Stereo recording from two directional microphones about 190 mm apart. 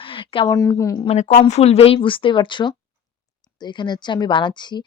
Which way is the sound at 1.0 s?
35° left (ahead or behind).